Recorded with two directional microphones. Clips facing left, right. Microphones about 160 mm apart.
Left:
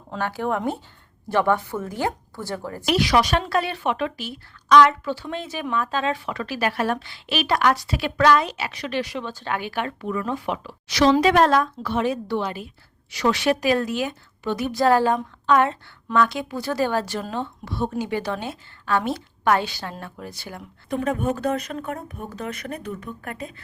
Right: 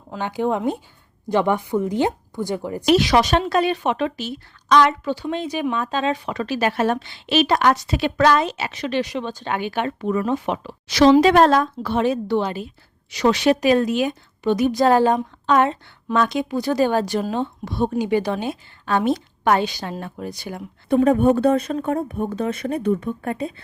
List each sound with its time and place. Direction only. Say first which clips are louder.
0.2 s a woman's voice: right 3 dB; 15° right (ahead or behind)
20.9 s a woman's voice: right 9 dB; 35° right (ahead or behind)